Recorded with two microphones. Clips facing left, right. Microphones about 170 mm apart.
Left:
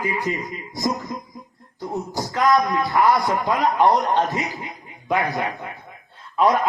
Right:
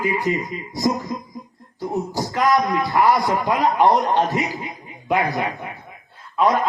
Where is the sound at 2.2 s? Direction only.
20° right (ahead or behind).